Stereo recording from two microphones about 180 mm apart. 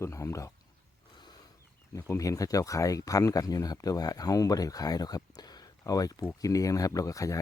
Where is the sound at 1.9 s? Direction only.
20° left (ahead or behind).